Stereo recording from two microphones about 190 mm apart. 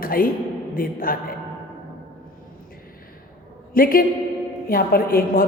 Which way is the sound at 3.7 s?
50° left (ahead or behind).